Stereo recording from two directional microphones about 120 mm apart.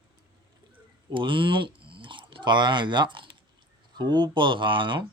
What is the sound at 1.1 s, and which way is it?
Speech, 45° right (ahead or behind).